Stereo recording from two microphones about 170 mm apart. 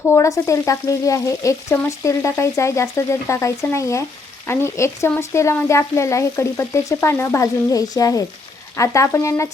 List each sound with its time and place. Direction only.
0.1 s frying: 15° left (ahead or behind)